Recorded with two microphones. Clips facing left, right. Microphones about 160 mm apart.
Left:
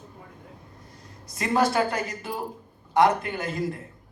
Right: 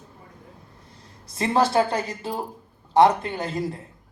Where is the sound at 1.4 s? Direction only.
25° right (ahead or behind).